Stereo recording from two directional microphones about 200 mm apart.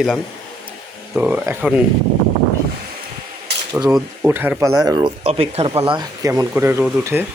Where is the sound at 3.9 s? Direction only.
10° right (ahead or behind).